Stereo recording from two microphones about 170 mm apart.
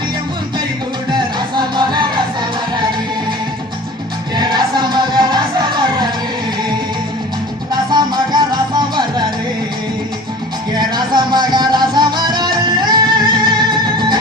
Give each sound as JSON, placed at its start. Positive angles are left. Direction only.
{"t": 1.1, "sound": "music", "side_deg": -25}
{"t": 4.4, "sound": "music", "side_deg": -25}
{"t": 7.7, "sound": "music", "side_deg": -25}
{"t": 10.8, "sound": "music", "side_deg": -25}